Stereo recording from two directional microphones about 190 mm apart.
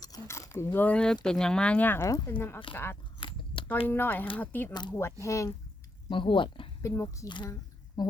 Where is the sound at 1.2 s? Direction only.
5° left (ahead or behind).